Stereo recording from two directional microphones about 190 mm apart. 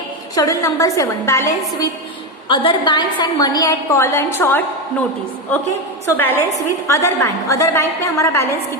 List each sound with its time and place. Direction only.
0.3 s a woman's voice: 20° left (ahead or behind)
6.1 s a woman's voice: 10° left (ahead or behind)